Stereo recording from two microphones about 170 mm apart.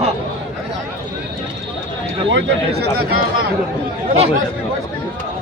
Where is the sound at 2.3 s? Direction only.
80° right.